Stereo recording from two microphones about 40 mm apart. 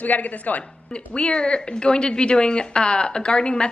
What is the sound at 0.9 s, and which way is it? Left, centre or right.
Speech, left.